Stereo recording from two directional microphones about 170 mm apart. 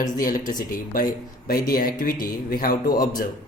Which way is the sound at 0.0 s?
50° left (ahead or behind).